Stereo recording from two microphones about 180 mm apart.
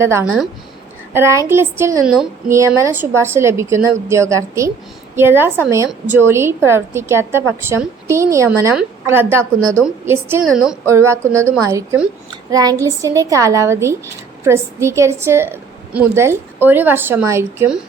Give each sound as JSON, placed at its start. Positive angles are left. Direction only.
{"t": 0.0, "sound": "a woman's voice", "side_deg": -15}
{"t": 10.4, "sound": "speech", "side_deg": 0}
{"t": 10.8, "sound": "a woman's voice", "side_deg": -15}
{"t": 12.5, "sound": "child singing", "side_deg": -20}
{"t": 12.8, "sound": "a woman's voice", "side_deg": -15}